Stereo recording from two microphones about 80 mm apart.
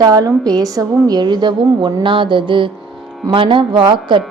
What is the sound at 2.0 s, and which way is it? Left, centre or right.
Speech, right.